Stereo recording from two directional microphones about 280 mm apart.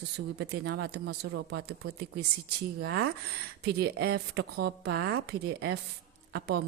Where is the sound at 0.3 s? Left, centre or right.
Right.